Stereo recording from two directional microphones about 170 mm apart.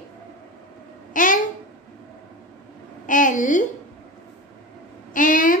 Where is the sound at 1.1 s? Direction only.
50° left (ahead or behind).